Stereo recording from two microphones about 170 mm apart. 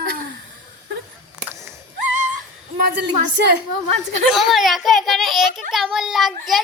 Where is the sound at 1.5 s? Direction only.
15° right (ahead or behind).